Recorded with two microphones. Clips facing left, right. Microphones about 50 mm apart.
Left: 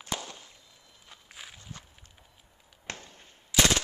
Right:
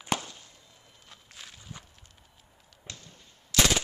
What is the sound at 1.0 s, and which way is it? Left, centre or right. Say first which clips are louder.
Walk: left 2 dB; centre.